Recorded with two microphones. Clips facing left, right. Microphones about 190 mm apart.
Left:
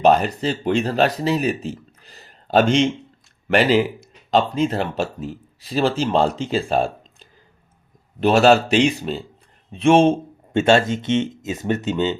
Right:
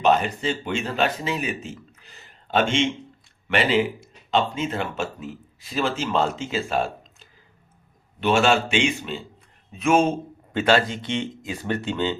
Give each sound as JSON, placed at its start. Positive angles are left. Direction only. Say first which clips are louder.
{"t": 0.0, "sound": "speech", "louder": "left 4 dB", "side_deg": 40}
{"t": 8.2, "sound": "speech", "louder": "left 5 dB", "side_deg": 40}